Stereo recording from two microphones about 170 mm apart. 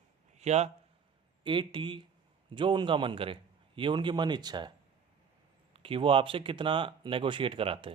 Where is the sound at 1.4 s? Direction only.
30° right (ahead or behind).